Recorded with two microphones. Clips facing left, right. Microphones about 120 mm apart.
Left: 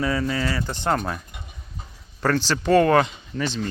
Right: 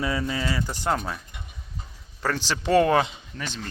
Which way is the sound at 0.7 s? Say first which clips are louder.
Left 3 dB; 5° right (ahead or behind).